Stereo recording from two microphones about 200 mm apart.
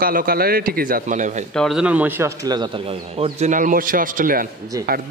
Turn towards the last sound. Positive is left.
turn(degrees=-45)  # may be behind; listen again after turning